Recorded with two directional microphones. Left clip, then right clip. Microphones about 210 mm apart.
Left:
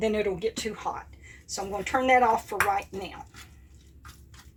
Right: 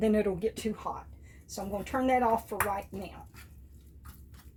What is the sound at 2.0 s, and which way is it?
Speech, 20° right (ahead or behind).